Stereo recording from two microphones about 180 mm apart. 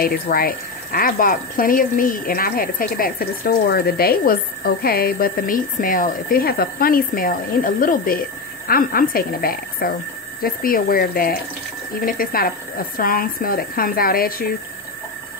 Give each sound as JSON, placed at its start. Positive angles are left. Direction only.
{"t": 0.0, "sound": "speech", "side_deg": 55}